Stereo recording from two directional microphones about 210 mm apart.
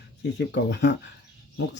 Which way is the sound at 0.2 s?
55° left (ahead or behind).